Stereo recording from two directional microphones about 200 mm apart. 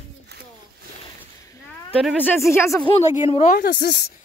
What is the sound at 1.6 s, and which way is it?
Speech, centre (ahead or behind).